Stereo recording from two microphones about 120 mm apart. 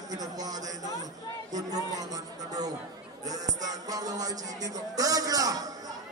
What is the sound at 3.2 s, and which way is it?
Music, 30° right (ahead or behind).